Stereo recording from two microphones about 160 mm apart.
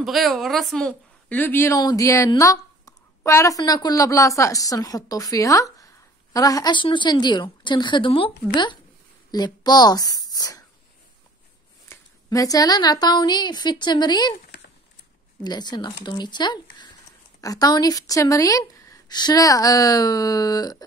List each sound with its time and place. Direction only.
0.0 s a woman's voice: centre (ahead or behind); by 8.3 s 35° left (ahead or behind)
9.3 s a woman's voice: 25° left (ahead or behind)
11.9 s a woman's voice: 20° left (ahead or behind)
15.4 s a woman's voice: 25° left (ahead or behind)